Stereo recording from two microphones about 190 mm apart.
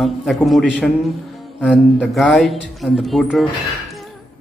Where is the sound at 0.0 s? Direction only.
Centre (ahead or behind).